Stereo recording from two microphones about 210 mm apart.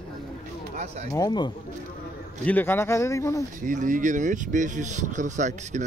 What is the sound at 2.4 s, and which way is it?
Speech, 10° left (ahead or behind).